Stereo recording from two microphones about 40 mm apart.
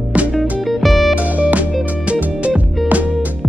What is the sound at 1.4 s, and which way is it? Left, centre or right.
Music, right.